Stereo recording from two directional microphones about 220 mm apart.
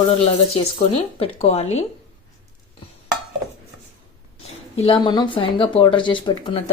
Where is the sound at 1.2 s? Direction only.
25° left (ahead or behind).